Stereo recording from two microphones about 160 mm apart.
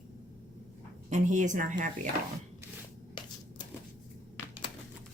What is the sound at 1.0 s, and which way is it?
Speech, 50° right (ahead or behind).